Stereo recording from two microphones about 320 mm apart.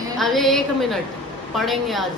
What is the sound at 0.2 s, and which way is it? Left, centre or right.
Speech, centre.